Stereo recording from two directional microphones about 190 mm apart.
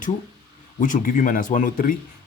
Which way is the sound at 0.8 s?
45° left (ahead or behind).